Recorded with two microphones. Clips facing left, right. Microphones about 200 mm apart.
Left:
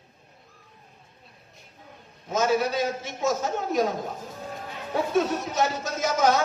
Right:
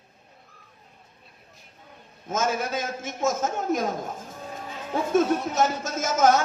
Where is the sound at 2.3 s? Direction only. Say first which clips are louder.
Left 3 dB; 50° right (ahead or behind).